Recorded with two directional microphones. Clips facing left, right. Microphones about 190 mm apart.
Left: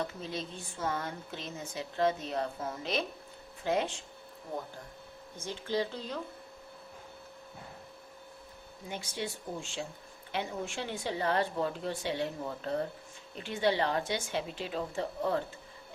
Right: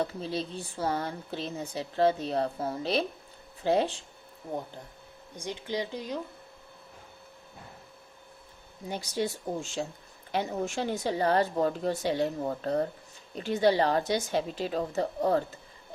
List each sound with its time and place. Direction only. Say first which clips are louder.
0.0 s speech: right 5 dB; 35° right (ahead or behind)
5.4 s speech: even; 15° right (ahead or behind)
8.9 s speech: right 7 dB; 40° right (ahead or behind)